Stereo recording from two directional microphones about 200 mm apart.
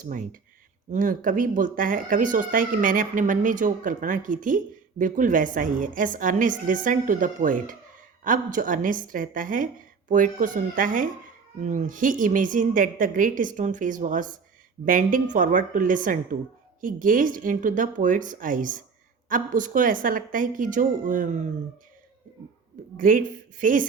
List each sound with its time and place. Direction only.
0.0 s speech: 40° right (ahead or behind)
23.0 s a woman's voice: 45° right (ahead or behind)